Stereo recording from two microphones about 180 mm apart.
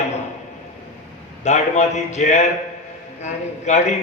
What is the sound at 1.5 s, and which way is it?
A man's voice, 40° left (ahead or behind).